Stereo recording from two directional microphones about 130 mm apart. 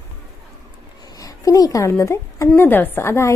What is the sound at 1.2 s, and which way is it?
A woman's voice, 25° left (ahead or behind).